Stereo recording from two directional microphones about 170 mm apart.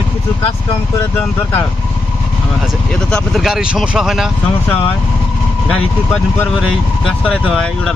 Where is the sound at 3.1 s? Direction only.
Centre (ahead or behind).